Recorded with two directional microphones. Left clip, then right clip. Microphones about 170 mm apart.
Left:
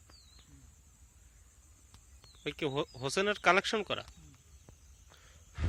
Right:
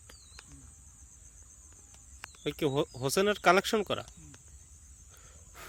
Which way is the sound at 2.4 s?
25° right (ahead or behind).